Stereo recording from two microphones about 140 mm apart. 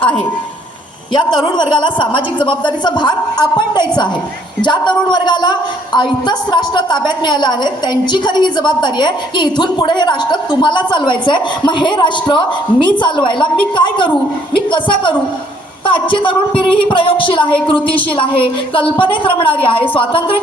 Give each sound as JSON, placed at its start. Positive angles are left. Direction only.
{"t": 1.1, "sound": "a woman's voice", "side_deg": 35}